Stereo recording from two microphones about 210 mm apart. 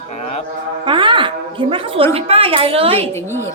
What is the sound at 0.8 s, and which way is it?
A woman's voice, 25° right (ahead or behind).